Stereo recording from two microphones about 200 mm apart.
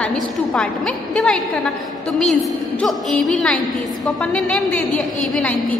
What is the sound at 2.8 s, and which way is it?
A woman's voice, centre (ahead or behind).